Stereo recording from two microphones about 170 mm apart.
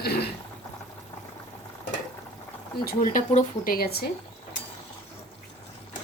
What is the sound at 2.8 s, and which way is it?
Speech, 50° left (ahead or behind).